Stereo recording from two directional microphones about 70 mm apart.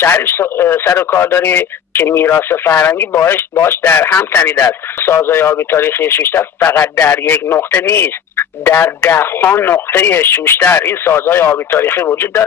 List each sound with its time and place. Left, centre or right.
0.0 s speech: left